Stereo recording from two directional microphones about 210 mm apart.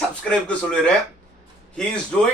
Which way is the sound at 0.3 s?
5° left (ahead or behind).